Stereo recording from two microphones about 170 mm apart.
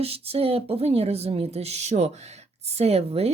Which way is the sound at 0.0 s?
35° right (ahead or behind).